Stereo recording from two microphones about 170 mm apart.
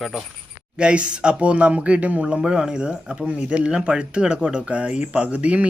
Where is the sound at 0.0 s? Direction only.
Centre (ahead or behind).